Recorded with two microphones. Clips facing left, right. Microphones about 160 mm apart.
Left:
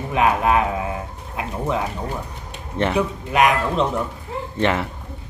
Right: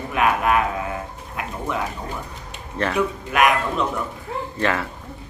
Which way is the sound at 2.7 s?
20° left (ahead or behind).